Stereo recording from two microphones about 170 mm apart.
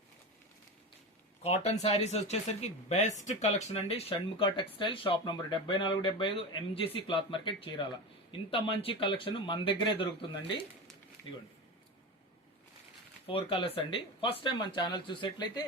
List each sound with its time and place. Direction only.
1.4 s speech: 40° left (ahead or behind)
13.2 s speech: 30° left (ahead or behind)